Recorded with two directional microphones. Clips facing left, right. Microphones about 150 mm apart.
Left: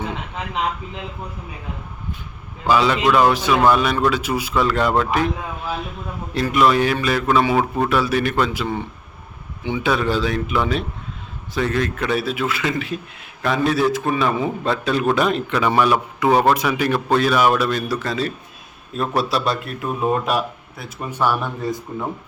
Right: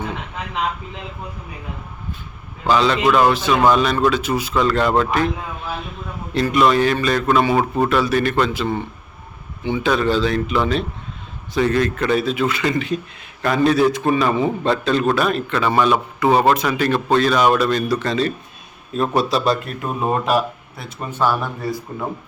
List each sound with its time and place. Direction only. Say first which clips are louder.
2.6 s a man's voice: even; 10° left (ahead or behind)
3.0 s a man's voice: right 1 dB; centre (ahead or behind)
3.3 s a man's voice: right 1 dB; 10° left (ahead or behind)
6.3 s a man's voice: right 1 dB; 5° left (ahead or behind)
16.2 s a man's voice: right 1 dB; 5° left (ahead or behind)
21.1 s a man's voice: right 1 dB; 15° left (ahead or behind)